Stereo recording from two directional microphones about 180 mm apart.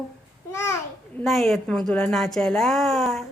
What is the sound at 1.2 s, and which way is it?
A woman's voice, centre (ahead or behind).